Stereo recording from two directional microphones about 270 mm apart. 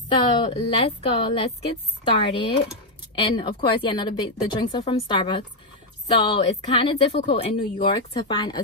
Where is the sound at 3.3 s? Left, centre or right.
Centre.